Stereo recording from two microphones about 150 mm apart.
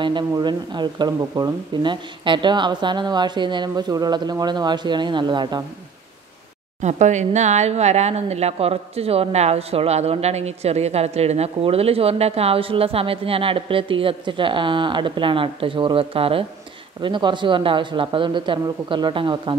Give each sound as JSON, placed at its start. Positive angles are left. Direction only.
{"t": 0.0, "sound": "speech", "side_deg": -30}
{"t": 6.8, "sound": "speech", "side_deg": -50}